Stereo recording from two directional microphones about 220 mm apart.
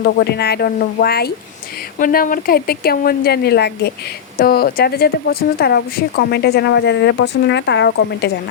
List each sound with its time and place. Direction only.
0.0 s a woman's voice: 45° left (ahead or behind)